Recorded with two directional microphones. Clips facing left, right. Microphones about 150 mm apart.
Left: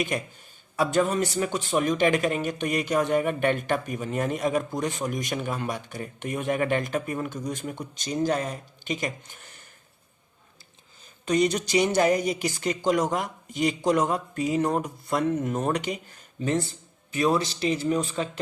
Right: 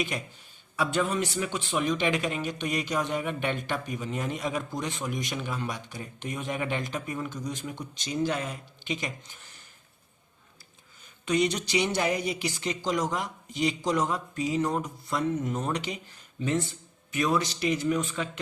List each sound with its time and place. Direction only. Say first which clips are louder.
0.8 s speech: left 4 dB; 40° left (ahead or behind)
11.3 s speech: left 3 dB; 45° left (ahead or behind)
16.4 s speech: left 2 dB; 35° left (ahead or behind)